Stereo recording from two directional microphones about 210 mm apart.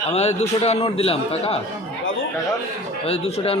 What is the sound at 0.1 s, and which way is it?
A man's voice, 30° left (ahead or behind).